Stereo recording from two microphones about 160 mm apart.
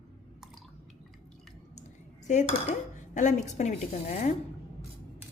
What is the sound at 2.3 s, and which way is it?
A woman's voice, 45° left (ahead or behind).